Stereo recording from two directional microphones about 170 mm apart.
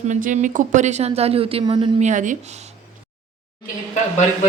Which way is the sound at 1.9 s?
45° right (ahead or behind).